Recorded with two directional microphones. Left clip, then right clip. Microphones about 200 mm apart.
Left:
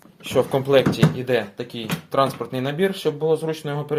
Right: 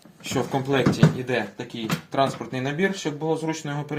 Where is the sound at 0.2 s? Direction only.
45° left (ahead or behind).